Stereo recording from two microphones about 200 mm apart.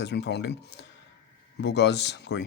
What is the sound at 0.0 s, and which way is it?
Speech, 55° left (ahead or behind).